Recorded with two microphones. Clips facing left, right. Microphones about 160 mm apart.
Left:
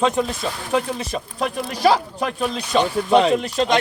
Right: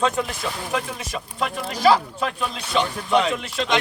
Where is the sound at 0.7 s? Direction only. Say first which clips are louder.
Left 9 dB; 35° left (ahead or behind).